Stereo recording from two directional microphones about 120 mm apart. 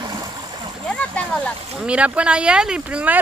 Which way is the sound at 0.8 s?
10° left (ahead or behind).